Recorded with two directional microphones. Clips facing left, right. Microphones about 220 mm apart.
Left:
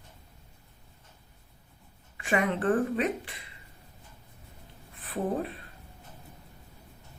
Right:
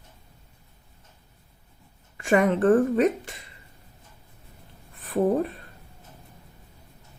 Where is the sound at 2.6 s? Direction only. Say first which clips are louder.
Right 7 dB; 45° right (ahead or behind).